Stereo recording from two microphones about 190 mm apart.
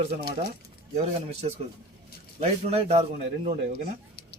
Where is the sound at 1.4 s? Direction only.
35° right (ahead or behind).